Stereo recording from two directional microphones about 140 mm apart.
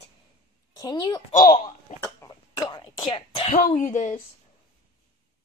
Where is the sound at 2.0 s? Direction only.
30° left (ahead or behind).